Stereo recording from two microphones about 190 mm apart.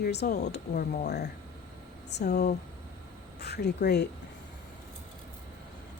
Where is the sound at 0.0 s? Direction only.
60° left (ahead or behind).